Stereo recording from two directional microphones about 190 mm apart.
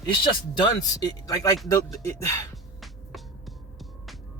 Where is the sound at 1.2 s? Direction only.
20° left (ahead or behind).